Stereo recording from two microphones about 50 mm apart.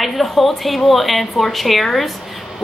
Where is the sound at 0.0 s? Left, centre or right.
Centre.